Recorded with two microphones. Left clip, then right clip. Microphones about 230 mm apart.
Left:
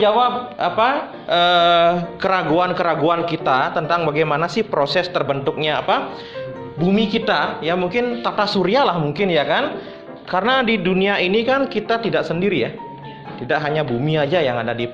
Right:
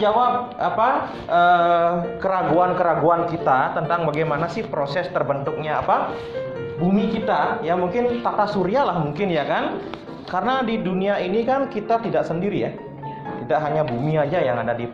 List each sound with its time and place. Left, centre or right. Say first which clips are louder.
0.0 s speech: left 2 dB; left
6.8 s speech: left 4 dB; left